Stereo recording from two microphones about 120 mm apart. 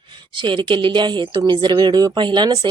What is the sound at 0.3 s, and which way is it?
Speech, 45° right (ahead or behind).